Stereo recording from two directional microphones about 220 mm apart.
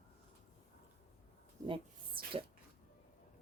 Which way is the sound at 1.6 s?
25° right (ahead or behind).